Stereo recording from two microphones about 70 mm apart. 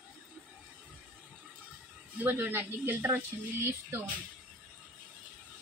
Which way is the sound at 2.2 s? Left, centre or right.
Right.